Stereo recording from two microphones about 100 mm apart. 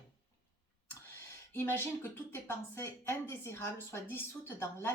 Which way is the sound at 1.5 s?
25° left (ahead or behind).